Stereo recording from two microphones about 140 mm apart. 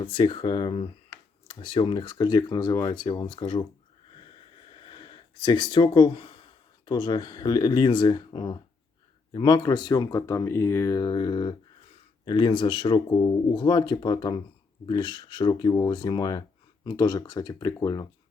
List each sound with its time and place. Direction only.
0.0 s speech: 40° left (ahead or behind)
4.2 s a sound: 40° left (ahead or behind)
6.8 s speech: 35° left (ahead or behind)